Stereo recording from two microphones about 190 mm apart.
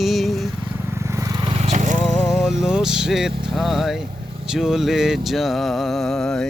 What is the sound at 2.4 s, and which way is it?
Vehicle, centre (ahead or behind).